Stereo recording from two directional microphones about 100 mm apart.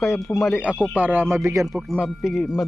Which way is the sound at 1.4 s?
30° right (ahead or behind).